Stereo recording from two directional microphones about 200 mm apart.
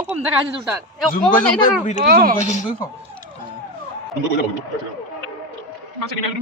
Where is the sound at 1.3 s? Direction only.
40° left (ahead or behind).